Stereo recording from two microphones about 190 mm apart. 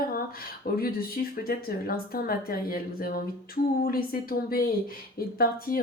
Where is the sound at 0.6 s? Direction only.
55° left (ahead or behind).